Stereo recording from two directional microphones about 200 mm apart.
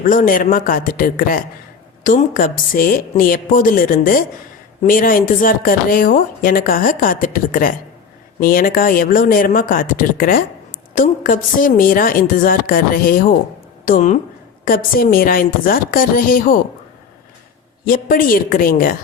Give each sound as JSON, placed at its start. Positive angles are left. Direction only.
{"t": 0.0, "sound": "a woman's voice", "side_deg": 40}
{"t": 17.8, "sound": "speech", "side_deg": 45}